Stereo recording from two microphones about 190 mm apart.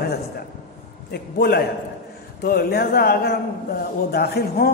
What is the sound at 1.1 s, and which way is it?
A man's voice, 55° left (ahead or behind).